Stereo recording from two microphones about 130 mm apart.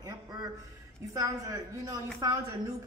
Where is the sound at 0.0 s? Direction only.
35° right (ahead or behind).